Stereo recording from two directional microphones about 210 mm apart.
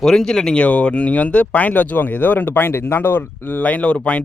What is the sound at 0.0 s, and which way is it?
Speech, centre (ahead or behind).